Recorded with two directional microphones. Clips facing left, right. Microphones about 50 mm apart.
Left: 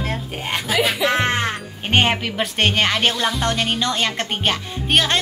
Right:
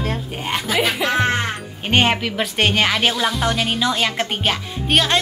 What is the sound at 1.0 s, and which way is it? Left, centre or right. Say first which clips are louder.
Music: right 1 dB; left.